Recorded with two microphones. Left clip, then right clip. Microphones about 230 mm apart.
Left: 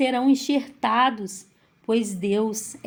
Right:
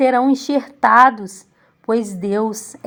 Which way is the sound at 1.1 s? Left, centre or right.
Right.